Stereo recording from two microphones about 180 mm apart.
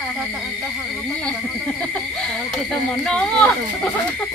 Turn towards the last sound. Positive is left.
turn(degrees=5)  # may be behind; listen again after turning